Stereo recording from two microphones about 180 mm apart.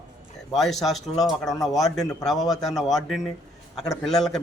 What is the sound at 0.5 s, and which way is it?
Speech, centre (ahead or behind).